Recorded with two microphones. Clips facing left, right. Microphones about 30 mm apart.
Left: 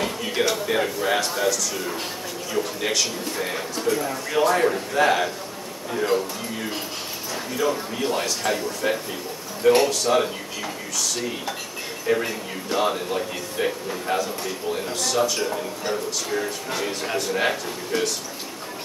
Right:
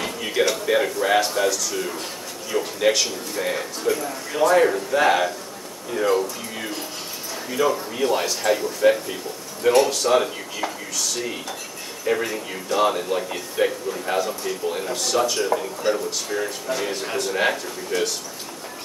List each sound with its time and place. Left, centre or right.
0.4 s speech: centre
4.0 s speech: left
4.5 s speech: centre
12.1 s speech: centre
16.3 s speech: centre